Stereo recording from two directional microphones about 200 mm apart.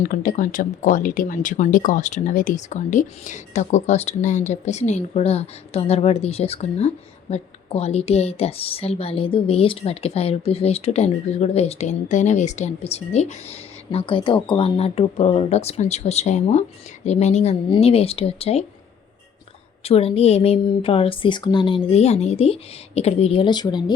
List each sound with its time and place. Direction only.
0.1 s speech: 40° left (ahead or behind)
19.8 s a woman's voice: 30° left (ahead or behind)